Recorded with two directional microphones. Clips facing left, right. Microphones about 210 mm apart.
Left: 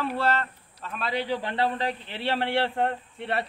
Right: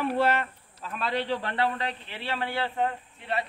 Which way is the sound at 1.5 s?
30° left (ahead or behind).